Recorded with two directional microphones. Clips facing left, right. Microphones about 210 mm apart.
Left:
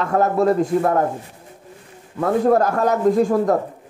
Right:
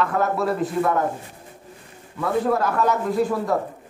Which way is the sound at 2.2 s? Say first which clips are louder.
Left 5 dB; 45° left (ahead or behind).